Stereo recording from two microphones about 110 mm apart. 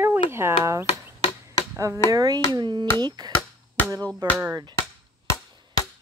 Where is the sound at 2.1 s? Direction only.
35° right (ahead or behind).